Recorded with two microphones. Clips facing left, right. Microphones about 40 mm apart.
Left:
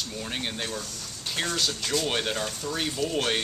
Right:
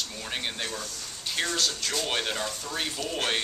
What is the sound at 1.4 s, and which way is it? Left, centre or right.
Speech, centre.